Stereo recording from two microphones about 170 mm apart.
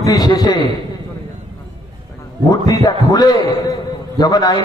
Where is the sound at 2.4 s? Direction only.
25° left (ahead or behind).